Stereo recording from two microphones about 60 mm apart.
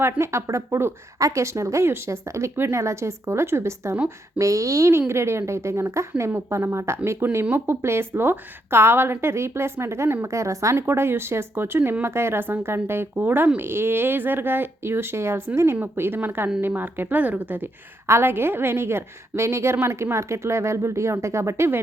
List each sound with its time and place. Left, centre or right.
0.2 s a woman's voice: right
4.4 s speech: right
4.9 s a woman's voice: right
10.2 s speech: right
10.8 s a woman's voice: right
18.0 s a woman's voice: right